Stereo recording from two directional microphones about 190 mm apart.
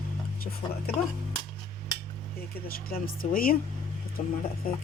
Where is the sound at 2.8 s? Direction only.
50° left (ahead or behind).